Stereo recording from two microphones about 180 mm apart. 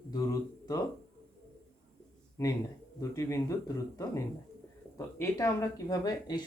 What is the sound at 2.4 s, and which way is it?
Speech, 15° left (ahead or behind).